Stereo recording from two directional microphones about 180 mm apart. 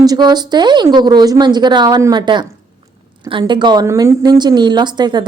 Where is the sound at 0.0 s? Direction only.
20° right (ahead or behind).